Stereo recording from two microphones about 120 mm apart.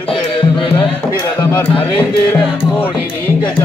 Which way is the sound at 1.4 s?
15° left (ahead or behind).